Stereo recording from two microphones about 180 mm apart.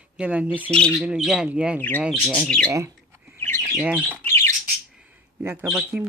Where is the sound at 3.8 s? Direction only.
10° right (ahead or behind).